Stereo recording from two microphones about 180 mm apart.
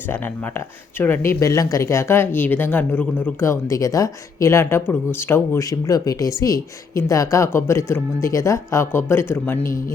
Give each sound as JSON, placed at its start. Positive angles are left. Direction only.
{"t": 0.9, "sound": "speech", "side_deg": 10}